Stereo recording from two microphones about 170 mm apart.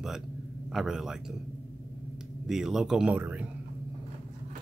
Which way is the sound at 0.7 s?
5° right (ahead or behind).